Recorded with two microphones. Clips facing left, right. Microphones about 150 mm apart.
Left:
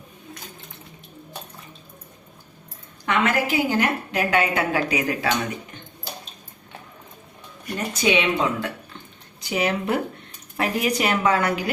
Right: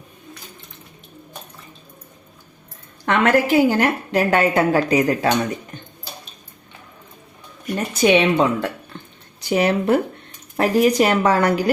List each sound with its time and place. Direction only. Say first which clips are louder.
3.1 s a woman's voice: right 6 dB; 45° right (ahead or behind)
8.0 s a woman's voice: right 6 dB; 45° right (ahead or behind)